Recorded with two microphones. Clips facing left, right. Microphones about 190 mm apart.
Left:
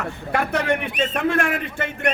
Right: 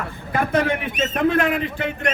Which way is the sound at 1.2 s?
50° left (ahead or behind).